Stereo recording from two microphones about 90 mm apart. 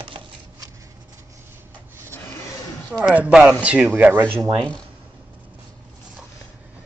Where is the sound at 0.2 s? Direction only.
90° right.